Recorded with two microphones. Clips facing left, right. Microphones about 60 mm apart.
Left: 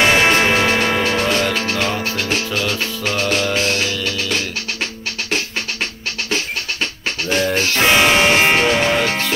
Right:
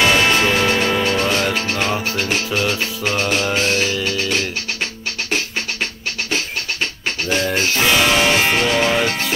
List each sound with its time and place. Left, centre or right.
0.0 s music: left
1.3 s music: centre
2.0 s music: centre
4.0 s music: right
7.2 s music: centre
7.8 s music: left
8.8 s music: centre